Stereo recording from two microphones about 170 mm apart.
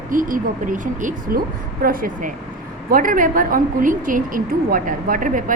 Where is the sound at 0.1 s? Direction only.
55° right (ahead or behind).